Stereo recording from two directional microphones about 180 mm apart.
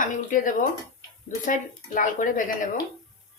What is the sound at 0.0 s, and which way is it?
Speech, 45° left (ahead or behind).